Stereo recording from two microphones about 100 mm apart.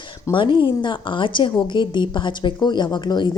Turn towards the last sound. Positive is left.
turn(degrees=50)  # may be behind; listen again after turning